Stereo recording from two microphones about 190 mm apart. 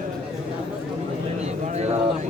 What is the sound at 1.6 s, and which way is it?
Speech, 35° right (ahead or behind).